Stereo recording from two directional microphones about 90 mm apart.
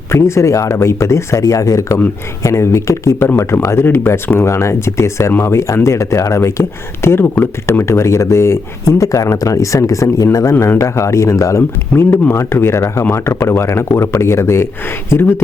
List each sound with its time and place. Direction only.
0.1 s speech: 30° left (ahead or behind)
10.5 s speech: 30° left (ahead or behind)